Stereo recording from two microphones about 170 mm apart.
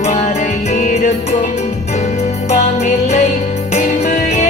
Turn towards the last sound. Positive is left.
turn(degrees=45)  # may be behind; listen again after turning